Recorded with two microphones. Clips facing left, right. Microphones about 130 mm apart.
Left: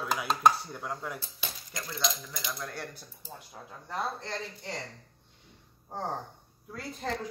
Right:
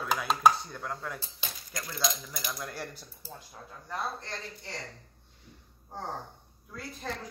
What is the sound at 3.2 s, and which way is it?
Speech, 20° left (ahead or behind).